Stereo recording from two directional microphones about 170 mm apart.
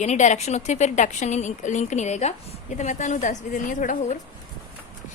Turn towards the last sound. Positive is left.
turn(degrees=50)  # may be behind; listen again after turning